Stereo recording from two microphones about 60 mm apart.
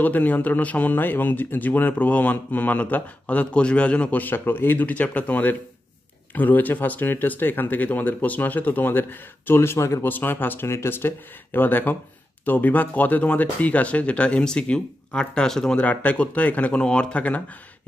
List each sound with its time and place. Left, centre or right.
0.0 s speech: left
9.6 s speech: left
10.0 s speech: left; by 15.8 s centre
15.8 s speech: left